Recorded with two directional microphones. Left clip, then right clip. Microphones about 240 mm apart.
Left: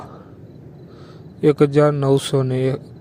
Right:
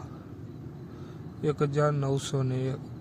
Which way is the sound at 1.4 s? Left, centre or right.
Left.